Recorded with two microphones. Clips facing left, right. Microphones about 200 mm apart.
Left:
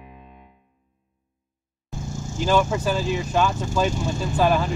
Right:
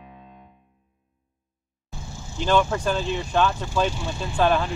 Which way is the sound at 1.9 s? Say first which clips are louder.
Left 7 dB; 45° left (ahead or behind).